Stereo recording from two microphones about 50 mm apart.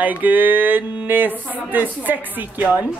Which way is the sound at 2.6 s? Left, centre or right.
Right.